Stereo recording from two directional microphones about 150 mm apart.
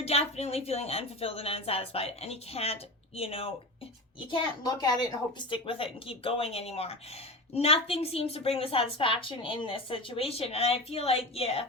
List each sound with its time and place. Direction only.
0.0 s a woman's voice: 45° left (ahead or behind)
4.8 s a woman's voice: 25° left (ahead or behind)